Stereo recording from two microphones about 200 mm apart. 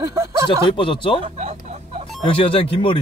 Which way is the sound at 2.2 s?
25° left (ahead or behind).